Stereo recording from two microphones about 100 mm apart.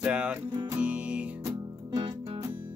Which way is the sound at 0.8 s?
10° right (ahead or behind).